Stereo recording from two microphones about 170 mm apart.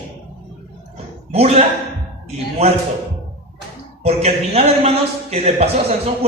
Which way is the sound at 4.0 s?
35° right (ahead or behind).